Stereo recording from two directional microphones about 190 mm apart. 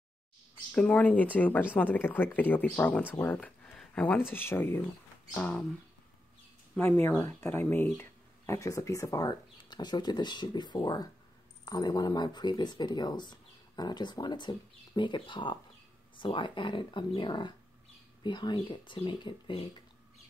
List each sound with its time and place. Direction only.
0.7 s speech: 5° left (ahead or behind)
6.7 s speech: 10° left (ahead or behind); by 19.7 s 25° left (ahead or behind)